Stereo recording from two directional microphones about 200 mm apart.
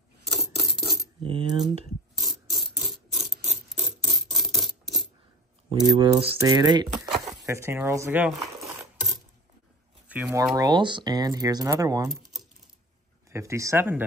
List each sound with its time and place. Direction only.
0.3 s coin: centre (ahead or behind)
1.2 s speech: 25° right (ahead or behind)
2.1 s mechanisms: centre (ahead or behind)
5.7 s speech: 20° right (ahead or behind); by 8.6 s centre (ahead or behind)
10.0 s speech: 10° right (ahead or behind)
10.5 s speech: 20° right (ahead or behind)
13.3 s speech: 15° right (ahead or behind)